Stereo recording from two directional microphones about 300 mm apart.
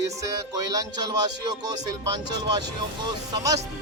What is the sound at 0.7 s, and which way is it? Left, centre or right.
Speech, centre.